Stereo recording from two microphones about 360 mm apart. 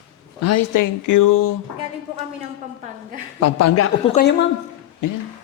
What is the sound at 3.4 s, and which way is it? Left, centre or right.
Speech, left.